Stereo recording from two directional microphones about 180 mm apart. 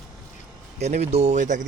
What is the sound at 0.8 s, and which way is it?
Speech, 35° right (ahead or behind).